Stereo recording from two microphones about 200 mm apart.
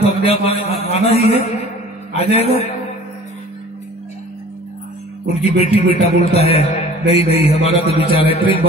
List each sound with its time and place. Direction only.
0.2 s a man's voice: 30° left (ahead or behind)
5.3 s a man's voice: 30° left (ahead or behind)